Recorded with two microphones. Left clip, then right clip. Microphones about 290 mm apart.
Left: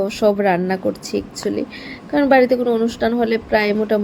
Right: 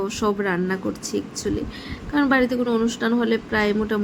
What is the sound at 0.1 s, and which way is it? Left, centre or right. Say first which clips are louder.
A woman's voice: left 7 dB; centre.